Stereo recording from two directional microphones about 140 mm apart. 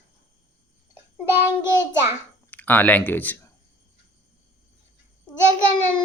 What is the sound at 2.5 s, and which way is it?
Speech, 10° left (ahead or behind).